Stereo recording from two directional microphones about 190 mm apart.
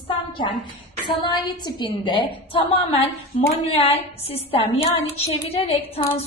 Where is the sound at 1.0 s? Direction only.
25° left (ahead or behind).